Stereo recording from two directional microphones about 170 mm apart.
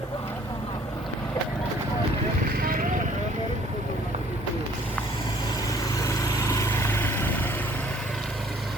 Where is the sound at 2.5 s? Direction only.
55° right (ahead or behind).